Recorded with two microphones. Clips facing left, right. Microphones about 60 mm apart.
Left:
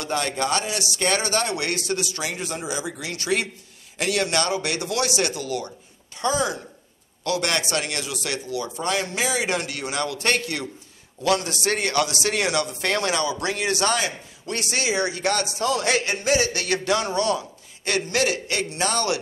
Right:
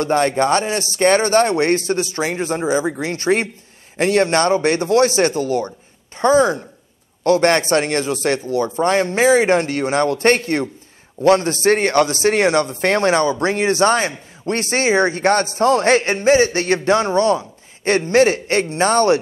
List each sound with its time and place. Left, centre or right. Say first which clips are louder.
0.0 s speech: right 9 dB; right